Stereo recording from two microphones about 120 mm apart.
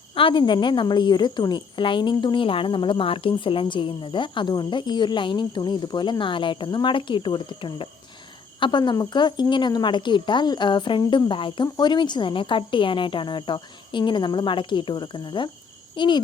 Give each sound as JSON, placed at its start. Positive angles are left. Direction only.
{"t": 0.1, "sound": "a woman's voice", "side_deg": 45}